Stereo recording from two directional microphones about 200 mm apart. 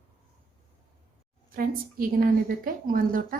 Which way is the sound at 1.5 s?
45° right (ahead or behind).